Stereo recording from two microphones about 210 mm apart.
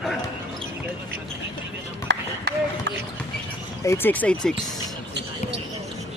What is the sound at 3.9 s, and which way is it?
Speech, 10° left (ahead or behind).